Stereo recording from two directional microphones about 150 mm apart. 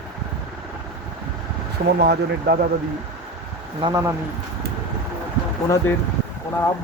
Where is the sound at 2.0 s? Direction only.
90° right.